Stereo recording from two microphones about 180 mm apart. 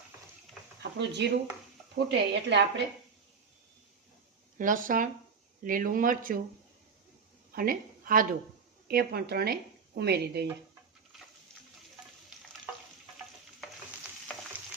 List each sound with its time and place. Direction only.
0.8 s a woman's voice: 75° right (ahead or behind)
4.5 s speech: 50° right (ahead or behind)
7.5 s a woman's voice: 50° right (ahead or behind)